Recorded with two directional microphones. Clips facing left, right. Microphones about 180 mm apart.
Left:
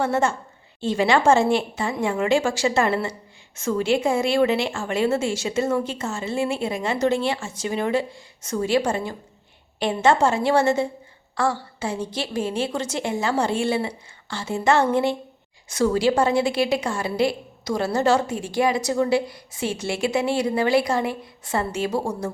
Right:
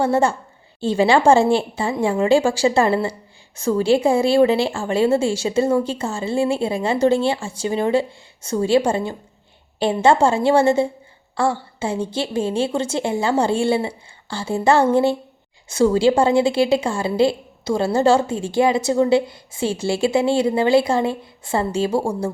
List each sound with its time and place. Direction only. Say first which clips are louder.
0.0 s a woman's voice: right 4 dB; 30° right (ahead or behind)